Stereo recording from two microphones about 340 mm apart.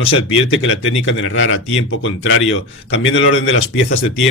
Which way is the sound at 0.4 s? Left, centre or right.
Left.